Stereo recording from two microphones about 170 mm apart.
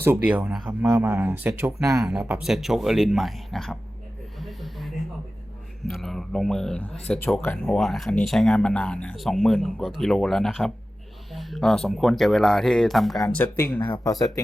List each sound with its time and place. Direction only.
0.0 s speech: 10° right (ahead or behind)
2.0 s speech: 5° right (ahead or behind)
4.4 s a sound: centre (ahead or behind)
5.8 s speech: centre (ahead or behind)
13.8 s speech: 25° left (ahead or behind)